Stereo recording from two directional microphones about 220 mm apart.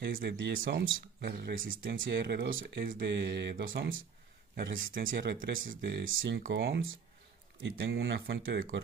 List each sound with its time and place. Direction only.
0.0 s speech: 45° right (ahead or behind)
2.0 s speech: 50° right (ahead or behind)
3.0 s speech: 50° right (ahead or behind)
4.9 s speech: 45° right (ahead or behind)